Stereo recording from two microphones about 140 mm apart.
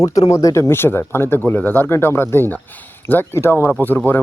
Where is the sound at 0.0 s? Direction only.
25° left (ahead or behind).